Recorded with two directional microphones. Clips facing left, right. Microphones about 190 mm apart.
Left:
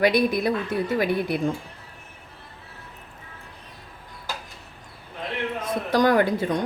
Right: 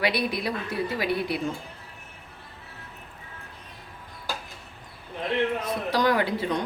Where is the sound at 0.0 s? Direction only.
45° left (ahead or behind).